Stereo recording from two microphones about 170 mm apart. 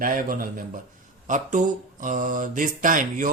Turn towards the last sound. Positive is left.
turn(degrees=-50)  # may be behind; listen again after turning